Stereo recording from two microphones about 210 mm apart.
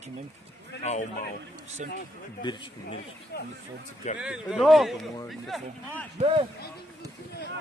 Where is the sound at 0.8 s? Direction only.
35° left (ahead or behind).